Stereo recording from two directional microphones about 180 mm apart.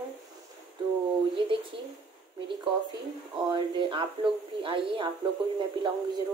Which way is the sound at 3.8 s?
25° right (ahead or behind).